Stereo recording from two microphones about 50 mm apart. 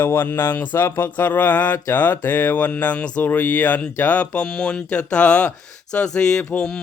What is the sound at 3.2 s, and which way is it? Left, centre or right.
Mantra, left.